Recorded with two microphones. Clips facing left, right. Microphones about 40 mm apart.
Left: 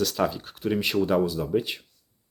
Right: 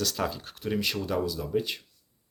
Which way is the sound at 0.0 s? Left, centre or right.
Centre.